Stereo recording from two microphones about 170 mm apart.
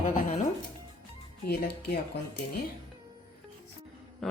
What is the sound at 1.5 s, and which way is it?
Speech, 70° left (ahead or behind).